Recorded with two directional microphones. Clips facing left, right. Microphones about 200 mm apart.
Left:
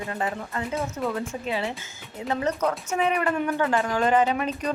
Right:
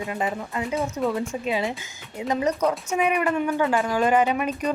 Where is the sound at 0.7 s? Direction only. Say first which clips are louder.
Right 4 dB; centre (ahead or behind).